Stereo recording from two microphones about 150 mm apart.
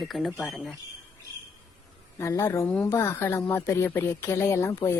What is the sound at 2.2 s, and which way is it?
Speech, 20° left (ahead or behind).